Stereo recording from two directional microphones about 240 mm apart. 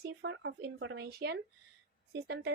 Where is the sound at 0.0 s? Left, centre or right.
Right.